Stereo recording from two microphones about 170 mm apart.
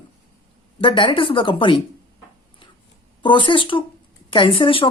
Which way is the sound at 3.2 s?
30° left (ahead or behind).